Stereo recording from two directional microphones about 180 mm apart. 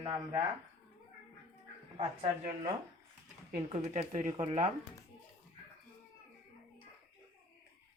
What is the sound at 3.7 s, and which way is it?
Speech, 40° right (ahead or behind).